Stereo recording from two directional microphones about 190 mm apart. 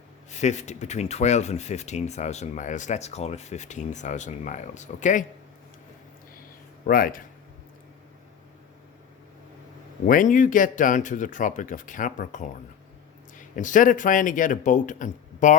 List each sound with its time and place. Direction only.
0.3 s speech: 35° left (ahead or behind)
6.8 s speech: 50° left (ahead or behind)
10.1 s speech: 45° left (ahead or behind)